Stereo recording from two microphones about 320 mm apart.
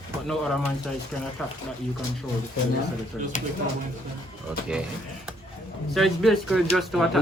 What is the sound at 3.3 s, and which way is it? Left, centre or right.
Speech, left.